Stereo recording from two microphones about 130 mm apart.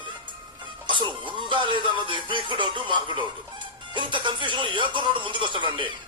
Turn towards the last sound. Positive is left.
turn(degrees=-40)  # may be behind; listen again after turning